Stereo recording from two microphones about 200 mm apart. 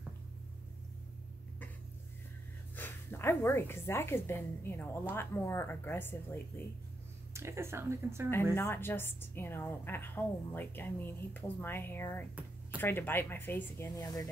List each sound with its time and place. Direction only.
2.7 s a woman's voice: 10° left (ahead or behind)
7.3 s speech: 15° right (ahead or behind)
8.5 s a woman's voice: 10° left (ahead or behind)